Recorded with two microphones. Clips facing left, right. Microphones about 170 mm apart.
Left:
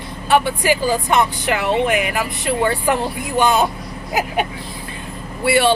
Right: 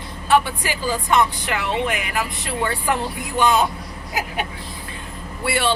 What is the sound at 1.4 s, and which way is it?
Speech, 60° left (ahead or behind).